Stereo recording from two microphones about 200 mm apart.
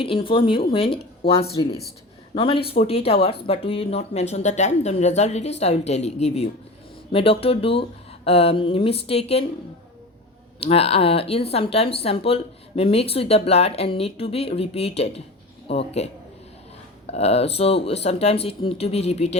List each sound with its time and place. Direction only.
0.0 s speech: 25° left (ahead or behind)
10.6 s speech: 30° left (ahead or behind)
17.1 s speech: 30° left (ahead or behind)